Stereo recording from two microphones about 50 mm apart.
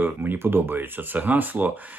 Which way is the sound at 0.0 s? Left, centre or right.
Right.